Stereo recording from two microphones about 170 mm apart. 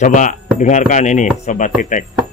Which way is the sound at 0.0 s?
45° left (ahead or behind).